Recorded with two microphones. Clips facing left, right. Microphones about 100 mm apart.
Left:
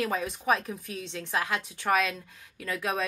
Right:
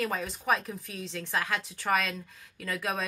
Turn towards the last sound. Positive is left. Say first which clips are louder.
# left 2 dB
turn(degrees=0)  # may be behind; listen again after turning